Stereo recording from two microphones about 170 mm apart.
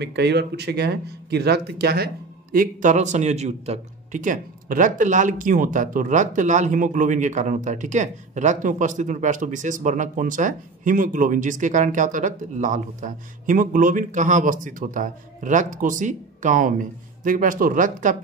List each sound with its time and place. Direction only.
0.0 s speech: 80° right
2.5 s a man's voice: 50° right (ahead or behind)